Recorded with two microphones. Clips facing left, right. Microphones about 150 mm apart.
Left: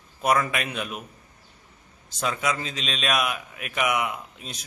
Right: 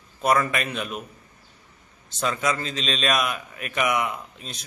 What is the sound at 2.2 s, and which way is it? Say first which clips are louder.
A man's voice: right 2 dB; 5° left (ahead or behind).